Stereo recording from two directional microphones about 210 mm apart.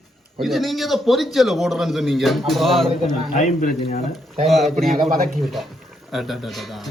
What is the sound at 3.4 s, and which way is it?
Speech, 35° left (ahead or behind).